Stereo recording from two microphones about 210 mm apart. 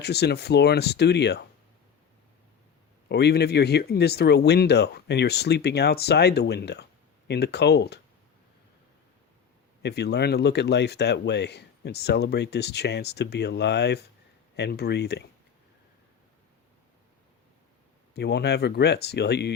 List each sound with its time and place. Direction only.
0.0 s speech: 50° left (ahead or behind)
3.1 s speech: 50° left (ahead or behind)
9.8 s speech: 55° left (ahead or behind)
18.1 s speech: 50° left (ahead or behind)